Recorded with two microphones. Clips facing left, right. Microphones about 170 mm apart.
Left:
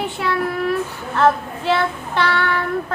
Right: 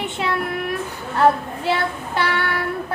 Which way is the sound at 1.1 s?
10° right (ahead or behind).